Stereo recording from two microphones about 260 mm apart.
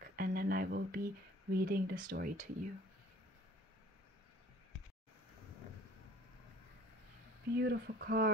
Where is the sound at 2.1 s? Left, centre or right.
Right.